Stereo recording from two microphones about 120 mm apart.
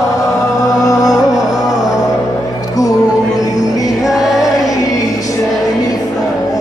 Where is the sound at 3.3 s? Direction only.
30° left (ahead or behind).